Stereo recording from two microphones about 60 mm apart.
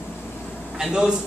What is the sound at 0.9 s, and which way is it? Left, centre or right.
Speech, centre.